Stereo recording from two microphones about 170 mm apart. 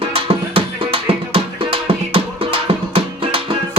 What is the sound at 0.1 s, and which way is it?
Music, 35° right (ahead or behind).